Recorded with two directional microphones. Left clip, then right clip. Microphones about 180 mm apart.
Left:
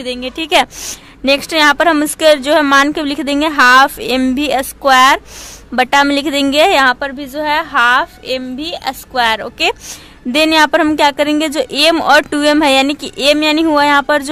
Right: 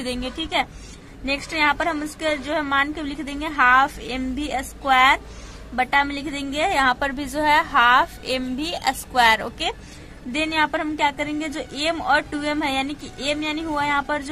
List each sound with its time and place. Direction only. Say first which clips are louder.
0.0 s a woman's voice: left 7 dB; 20° left (ahead or behind)
0.4 s a woman's voice: left 13 dB; 40° left (ahead or behind)
7.0 s a woman's voice: left 4 dB; 15° left (ahead or behind)
10.3 s a woman's voice: left 12 dB; 40° left (ahead or behind)